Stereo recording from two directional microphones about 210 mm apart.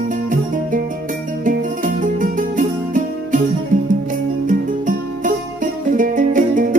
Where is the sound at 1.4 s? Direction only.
40° right (ahead or behind).